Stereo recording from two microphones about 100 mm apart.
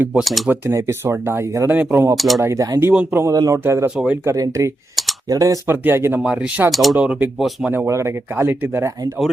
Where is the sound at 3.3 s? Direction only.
35° right (ahead or behind).